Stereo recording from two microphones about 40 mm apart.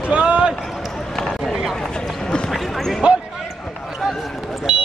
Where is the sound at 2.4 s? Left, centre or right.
Centre.